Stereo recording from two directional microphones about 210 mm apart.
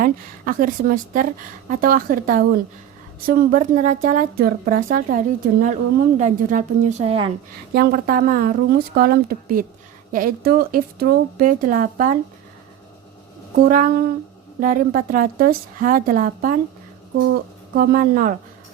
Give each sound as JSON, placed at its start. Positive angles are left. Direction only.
{"t": 0.0, "sound": "a woman's voice", "side_deg": -40}
{"t": 7.7, "sound": "a woman's voice", "side_deg": -50}
{"t": 13.6, "sound": "a woman's voice", "side_deg": -40}
{"t": 17.7, "sound": "a woman's voice", "side_deg": -45}